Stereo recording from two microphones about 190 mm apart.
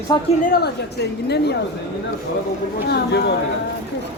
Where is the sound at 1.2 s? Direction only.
60° left (ahead or behind).